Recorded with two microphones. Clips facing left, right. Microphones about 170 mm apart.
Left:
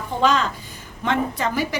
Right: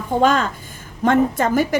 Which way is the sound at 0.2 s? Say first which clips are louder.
Right 2 dB; 50° right (ahead or behind).